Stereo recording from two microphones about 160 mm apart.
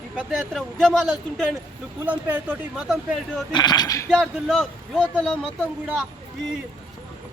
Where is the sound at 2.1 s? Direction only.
10° right (ahead or behind).